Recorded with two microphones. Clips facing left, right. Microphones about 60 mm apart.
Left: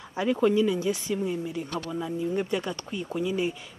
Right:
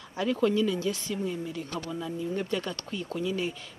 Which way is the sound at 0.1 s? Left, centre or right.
Centre.